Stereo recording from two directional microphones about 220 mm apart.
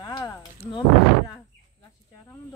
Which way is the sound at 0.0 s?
15° left (ahead or behind).